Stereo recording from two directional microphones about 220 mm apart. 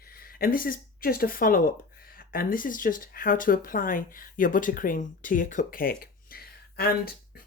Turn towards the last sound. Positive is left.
turn(degrees=45)  # may be behind; listen again after turning